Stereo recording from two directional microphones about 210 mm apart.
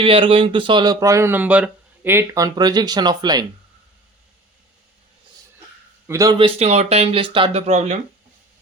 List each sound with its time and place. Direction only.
0.0 s speech: 25° right (ahead or behind)
6.1 s speech: 15° right (ahead or behind); by 7.9 s 30° right (ahead or behind)